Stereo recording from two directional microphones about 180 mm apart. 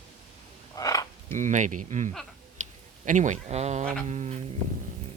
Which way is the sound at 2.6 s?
40° right (ahead or behind).